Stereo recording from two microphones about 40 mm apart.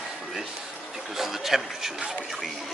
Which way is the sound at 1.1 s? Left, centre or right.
Centre.